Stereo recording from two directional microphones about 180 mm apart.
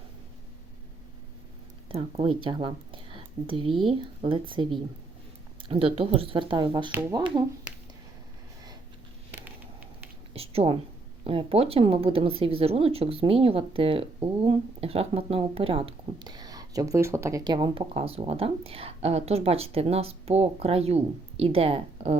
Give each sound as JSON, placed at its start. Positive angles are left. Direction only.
{"t": 1.9, "sound": "speech", "side_deg": -30}
{"t": 10.3, "sound": "a woman's voice", "side_deg": -35}